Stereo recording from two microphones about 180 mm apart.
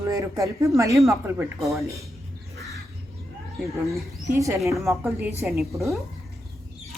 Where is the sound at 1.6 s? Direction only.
Centre (ahead or behind).